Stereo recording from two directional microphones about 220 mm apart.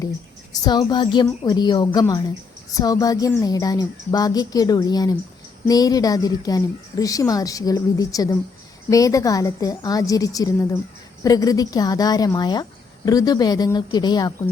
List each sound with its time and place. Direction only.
0.6 s a woman's voice: 20° left (ahead or behind)